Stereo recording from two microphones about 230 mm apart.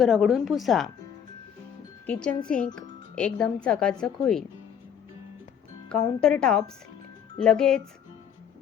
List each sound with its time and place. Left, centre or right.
0.0 s speech: centre
2.0 s speech: centre
5.9 s speech: centre